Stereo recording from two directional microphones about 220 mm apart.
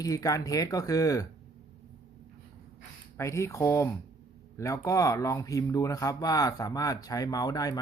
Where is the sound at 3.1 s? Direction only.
10° left (ahead or behind).